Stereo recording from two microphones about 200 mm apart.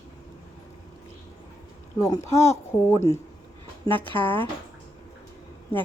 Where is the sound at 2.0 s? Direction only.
15° left (ahead or behind).